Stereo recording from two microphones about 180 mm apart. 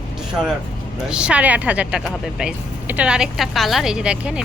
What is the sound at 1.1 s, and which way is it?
Speech, 5° right (ahead or behind).